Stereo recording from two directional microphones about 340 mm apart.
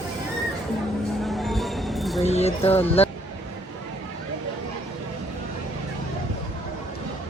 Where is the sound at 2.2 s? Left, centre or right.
Centre.